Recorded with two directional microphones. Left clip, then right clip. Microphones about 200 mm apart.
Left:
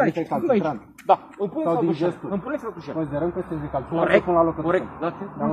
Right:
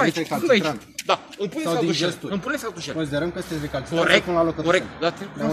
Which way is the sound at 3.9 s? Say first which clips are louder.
Even; 45° right (ahead or behind).